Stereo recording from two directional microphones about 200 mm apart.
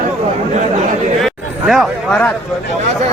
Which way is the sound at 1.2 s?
Centre (ahead or behind).